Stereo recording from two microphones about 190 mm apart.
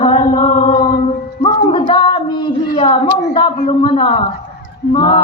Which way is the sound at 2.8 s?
25° left (ahead or behind).